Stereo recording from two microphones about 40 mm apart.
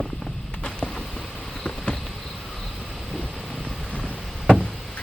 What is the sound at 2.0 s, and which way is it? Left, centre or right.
Insect, centre.